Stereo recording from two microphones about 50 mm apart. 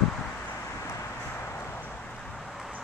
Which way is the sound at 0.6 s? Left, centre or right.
Left.